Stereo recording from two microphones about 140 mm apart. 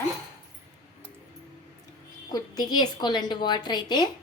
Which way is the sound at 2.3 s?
30° left (ahead or behind).